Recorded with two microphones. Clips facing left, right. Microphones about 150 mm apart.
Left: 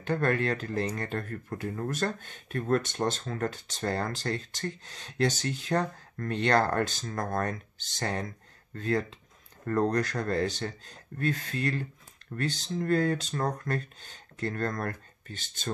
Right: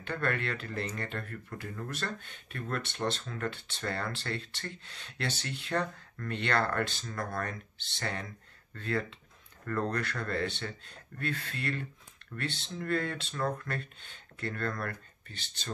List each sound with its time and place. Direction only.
0.0 s speech: 40° left (ahead or behind)